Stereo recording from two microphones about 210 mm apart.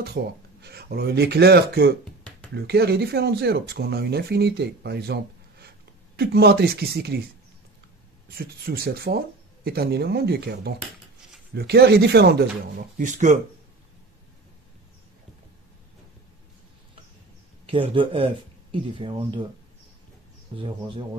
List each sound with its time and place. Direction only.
0.0 s speech: 50° right (ahead or behind)
8.4 s speech: 45° right (ahead or behind)
17.6 s speech: 25° right (ahead or behind)
20.5 s speech: 25° right (ahead or behind)